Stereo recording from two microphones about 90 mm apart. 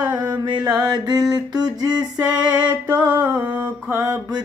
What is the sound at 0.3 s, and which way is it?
Mantra, 45° right (ahead or behind).